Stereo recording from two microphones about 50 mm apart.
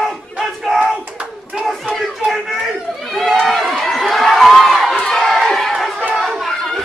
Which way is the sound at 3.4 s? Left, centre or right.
Centre.